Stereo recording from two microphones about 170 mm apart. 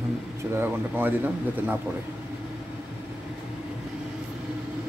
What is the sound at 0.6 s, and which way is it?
Speech, 10° right (ahead or behind).